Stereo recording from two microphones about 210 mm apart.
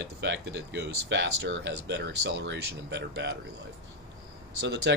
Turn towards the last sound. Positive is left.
turn(degrees=-55)  # may be behind; listen again after turning